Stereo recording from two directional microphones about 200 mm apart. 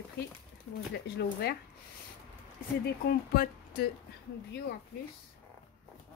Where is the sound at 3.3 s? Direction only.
50° left (ahead or behind).